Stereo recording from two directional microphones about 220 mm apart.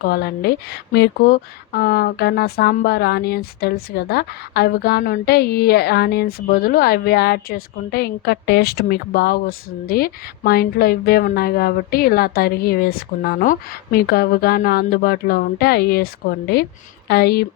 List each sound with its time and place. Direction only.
0.0 s speech: 45° left (ahead or behind)